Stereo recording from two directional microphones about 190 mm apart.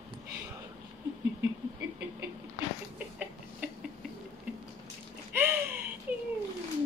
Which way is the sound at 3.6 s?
10° right (ahead or behind).